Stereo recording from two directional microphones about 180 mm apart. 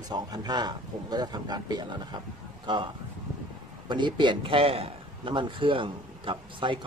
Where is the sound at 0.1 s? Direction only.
20° right (ahead or behind).